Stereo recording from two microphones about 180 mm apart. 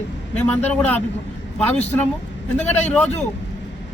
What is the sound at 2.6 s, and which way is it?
Speech, 40° left (ahead or behind).